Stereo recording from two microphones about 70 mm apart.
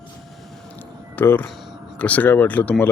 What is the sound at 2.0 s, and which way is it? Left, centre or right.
Speech, left.